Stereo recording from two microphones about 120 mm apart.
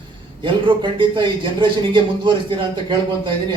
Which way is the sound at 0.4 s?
40° right (ahead or behind).